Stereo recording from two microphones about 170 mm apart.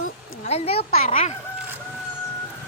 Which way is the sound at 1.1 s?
50° left (ahead or behind).